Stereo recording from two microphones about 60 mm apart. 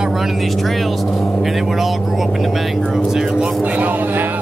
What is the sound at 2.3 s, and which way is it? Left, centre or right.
Vehicle, centre.